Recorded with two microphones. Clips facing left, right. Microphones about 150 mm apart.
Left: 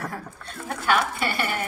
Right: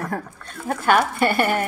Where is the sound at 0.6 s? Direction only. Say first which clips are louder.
Right 5 dB; 50° right (ahead or behind).